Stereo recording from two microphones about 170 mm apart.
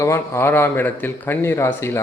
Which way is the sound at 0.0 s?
15° left (ahead or behind).